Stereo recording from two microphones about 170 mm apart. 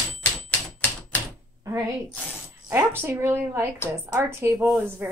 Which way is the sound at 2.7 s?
10° right (ahead or behind).